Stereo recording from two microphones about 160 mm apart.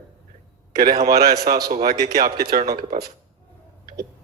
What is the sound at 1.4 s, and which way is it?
Speech, 70° right (ahead or behind).